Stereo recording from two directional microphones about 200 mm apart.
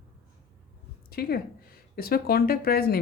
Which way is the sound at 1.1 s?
50° left (ahead or behind).